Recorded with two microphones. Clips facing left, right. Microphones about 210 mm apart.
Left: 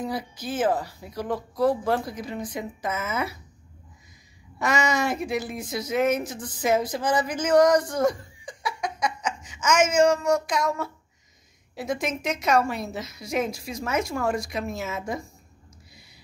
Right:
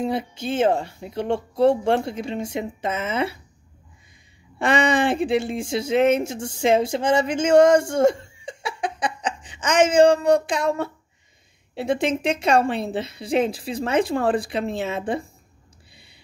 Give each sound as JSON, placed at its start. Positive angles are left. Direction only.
{"t": 0.0, "sound": "speech", "side_deg": -25}
{"t": 4.6, "sound": "speech", "side_deg": -30}